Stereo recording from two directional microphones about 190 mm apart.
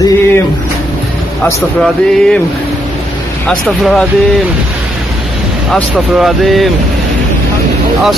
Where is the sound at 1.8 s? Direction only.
5° left (ahead or behind).